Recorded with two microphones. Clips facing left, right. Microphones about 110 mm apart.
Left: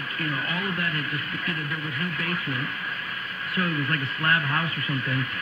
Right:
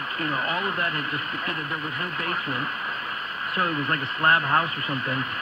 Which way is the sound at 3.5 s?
30° right (ahead or behind).